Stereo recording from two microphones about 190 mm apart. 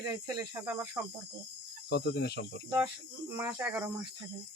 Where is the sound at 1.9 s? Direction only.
60° left (ahead or behind).